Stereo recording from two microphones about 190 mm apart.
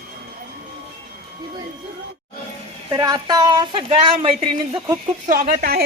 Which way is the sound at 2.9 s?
20° right (ahead or behind).